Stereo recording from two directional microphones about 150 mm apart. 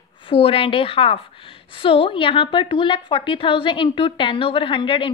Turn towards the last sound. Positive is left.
turn(degrees=35)  # may be behind; listen again after turning